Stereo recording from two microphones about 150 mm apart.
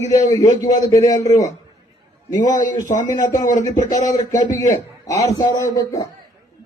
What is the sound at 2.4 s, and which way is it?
Speech, 55° left (ahead or behind).